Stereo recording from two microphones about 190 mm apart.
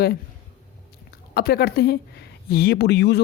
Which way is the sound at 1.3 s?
55° left (ahead or behind).